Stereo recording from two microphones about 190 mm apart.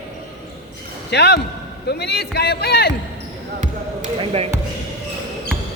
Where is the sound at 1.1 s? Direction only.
60° left (ahead or behind).